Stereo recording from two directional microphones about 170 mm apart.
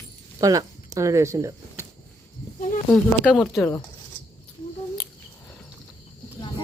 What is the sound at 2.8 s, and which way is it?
Speech, 5° left (ahead or behind).